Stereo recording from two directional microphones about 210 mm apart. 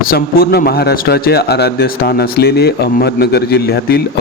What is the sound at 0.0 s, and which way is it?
Speech, 45° left (ahead or behind).